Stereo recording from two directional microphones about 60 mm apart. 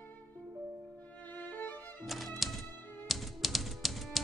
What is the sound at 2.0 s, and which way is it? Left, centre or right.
Music, centre.